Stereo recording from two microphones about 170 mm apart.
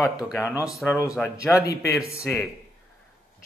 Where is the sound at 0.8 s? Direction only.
5° left (ahead or behind).